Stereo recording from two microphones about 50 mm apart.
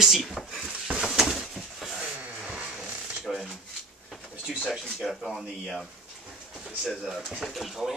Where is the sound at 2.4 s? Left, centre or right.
Centre.